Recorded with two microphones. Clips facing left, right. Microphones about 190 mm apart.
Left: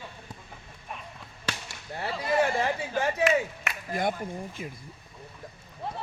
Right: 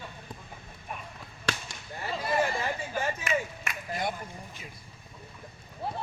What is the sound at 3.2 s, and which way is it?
Clapping, 65° left (ahead or behind).